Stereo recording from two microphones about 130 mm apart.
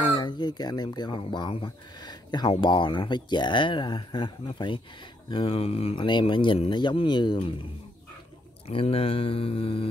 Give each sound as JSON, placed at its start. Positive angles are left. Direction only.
{"t": 0.0, "sound": "speech", "side_deg": 40}
{"t": 8.6, "sound": "speech", "side_deg": 50}